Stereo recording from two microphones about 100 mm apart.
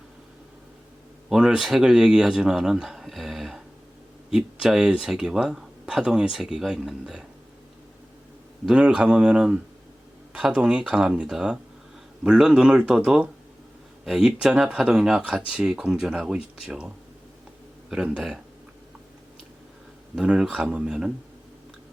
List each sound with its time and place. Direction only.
1.3 s speech: 5° right (ahead or behind)
8.6 s speech: 10° right (ahead or behind)
20.1 s speech: 10° right (ahead or behind)